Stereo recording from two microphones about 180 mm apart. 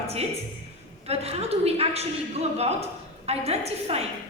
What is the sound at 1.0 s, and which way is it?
A woman's voice, 35° right (ahead or behind).